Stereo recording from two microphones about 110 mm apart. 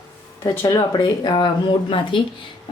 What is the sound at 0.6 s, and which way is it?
Speech, 40° left (ahead or behind).